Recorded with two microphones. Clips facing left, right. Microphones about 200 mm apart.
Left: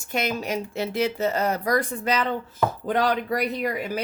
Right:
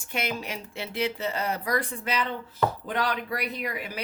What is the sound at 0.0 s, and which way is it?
Speech, 40° left (ahead or behind).